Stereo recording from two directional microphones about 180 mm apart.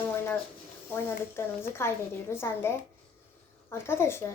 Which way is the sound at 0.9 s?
15° left (ahead or behind).